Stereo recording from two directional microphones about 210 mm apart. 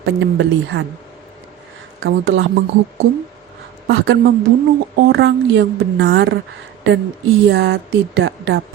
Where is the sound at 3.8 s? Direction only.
55° right (ahead or behind).